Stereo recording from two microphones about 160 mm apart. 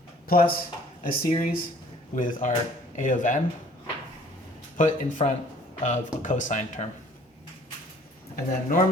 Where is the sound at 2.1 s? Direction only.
55° left (ahead or behind).